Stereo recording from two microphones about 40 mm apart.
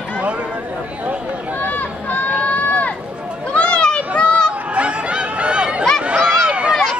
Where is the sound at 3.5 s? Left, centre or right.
Left.